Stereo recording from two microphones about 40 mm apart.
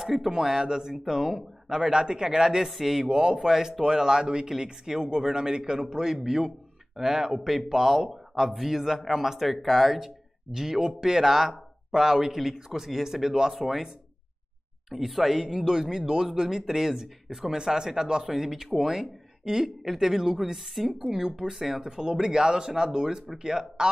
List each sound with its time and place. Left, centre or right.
0.0 s speech: centre
3.1 s speech: right
3.3 s a man's voice: centre
9.9 s speech: centre
14.9 s a man's voice: centre